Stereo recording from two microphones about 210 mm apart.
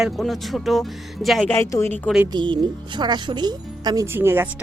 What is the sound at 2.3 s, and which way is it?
Speech, 20° right (ahead or behind).